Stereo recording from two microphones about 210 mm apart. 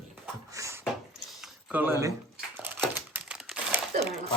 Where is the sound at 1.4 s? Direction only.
10° right (ahead or behind).